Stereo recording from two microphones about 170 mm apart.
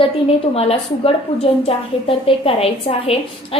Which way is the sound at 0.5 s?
35° left (ahead or behind).